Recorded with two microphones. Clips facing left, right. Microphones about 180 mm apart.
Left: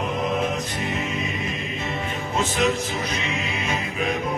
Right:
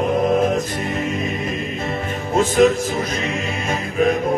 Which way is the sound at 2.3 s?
45° right (ahead or behind).